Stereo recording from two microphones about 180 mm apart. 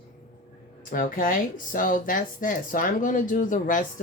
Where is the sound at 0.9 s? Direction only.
45° left (ahead or behind).